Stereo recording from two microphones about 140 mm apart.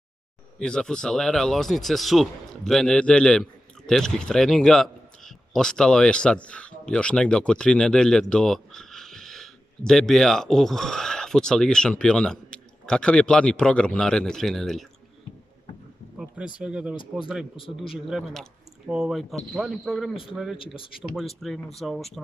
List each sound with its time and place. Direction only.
0.6 s speech: 5° left (ahead or behind)
16.6 s speech: 10° right (ahead or behind)
20.5 s speech: 40° left (ahead or behind)
21.4 s speech: centre (ahead or behind)